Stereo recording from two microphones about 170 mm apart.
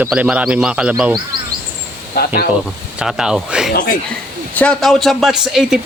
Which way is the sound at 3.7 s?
55° left (ahead or behind).